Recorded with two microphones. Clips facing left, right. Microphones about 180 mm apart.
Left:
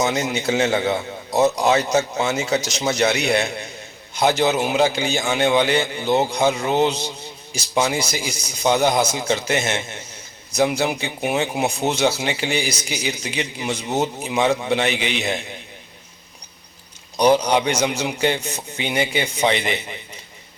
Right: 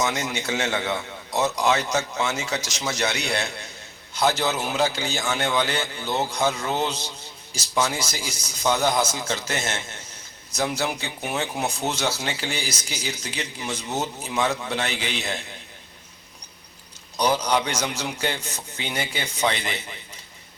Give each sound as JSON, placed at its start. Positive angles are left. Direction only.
{"t": 0.9, "sound": "a man's voice", "side_deg": 35}
{"t": 2.1, "sound": "speech", "side_deg": 20}
{"t": 17.2, "sound": "speech", "side_deg": 15}